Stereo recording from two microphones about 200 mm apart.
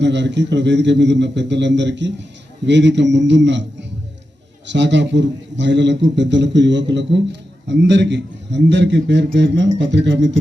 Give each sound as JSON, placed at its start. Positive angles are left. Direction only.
{"t": 0.0, "sound": "a man's voice", "side_deg": -60}
{"t": 4.7, "sound": "a man's voice", "side_deg": -65}